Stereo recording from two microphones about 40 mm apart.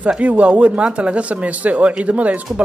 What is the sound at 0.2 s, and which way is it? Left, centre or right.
A man's voice, right.